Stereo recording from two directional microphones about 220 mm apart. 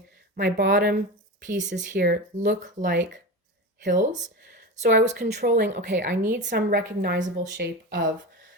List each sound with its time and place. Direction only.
0.3 s speech: 40° right (ahead or behind)